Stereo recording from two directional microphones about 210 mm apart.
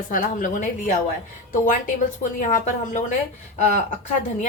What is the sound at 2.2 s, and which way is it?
A woman's voice, 35° left (ahead or behind).